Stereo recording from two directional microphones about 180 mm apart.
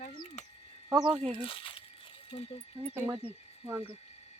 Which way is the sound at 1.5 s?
30° left (ahead or behind).